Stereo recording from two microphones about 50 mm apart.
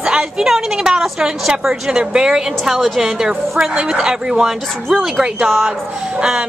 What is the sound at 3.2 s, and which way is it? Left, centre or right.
A woman's voice, centre.